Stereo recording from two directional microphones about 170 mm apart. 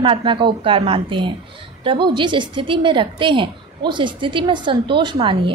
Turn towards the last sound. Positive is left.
turn(degrees=-30)  # may be behind; listen again after turning